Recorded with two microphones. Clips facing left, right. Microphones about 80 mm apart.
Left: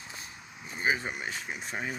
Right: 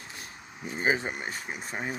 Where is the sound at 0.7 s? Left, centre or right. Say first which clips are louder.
Right 2 dB; right.